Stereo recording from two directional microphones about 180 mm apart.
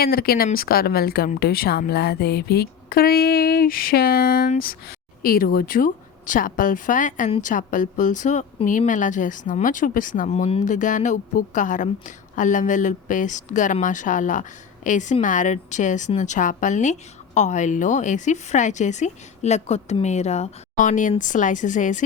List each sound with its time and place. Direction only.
0.0 s a woman's voice: 55° left (ahead or behind)